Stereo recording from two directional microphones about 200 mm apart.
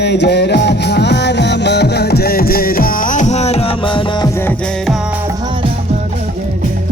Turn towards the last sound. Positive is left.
turn(degrees=-25)  # may be behind; listen again after turning